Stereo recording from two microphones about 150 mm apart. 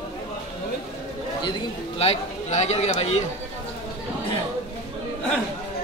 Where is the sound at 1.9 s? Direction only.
45° left (ahead or behind).